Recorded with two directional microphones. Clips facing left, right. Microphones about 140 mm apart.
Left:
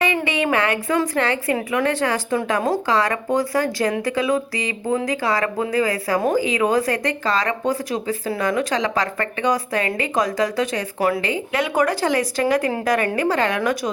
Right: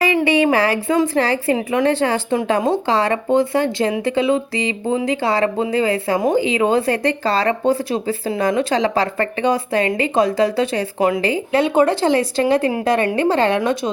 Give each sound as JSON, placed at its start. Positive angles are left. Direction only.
{"t": 0.0, "sound": "a woman's voice", "side_deg": -30}